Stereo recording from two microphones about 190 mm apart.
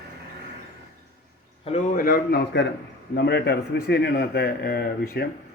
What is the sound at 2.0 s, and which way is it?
A man's voice, 50° left (ahead or behind).